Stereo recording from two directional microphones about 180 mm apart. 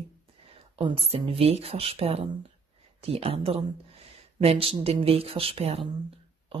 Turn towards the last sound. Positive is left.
turn(degrees=-35)  # may be behind; listen again after turning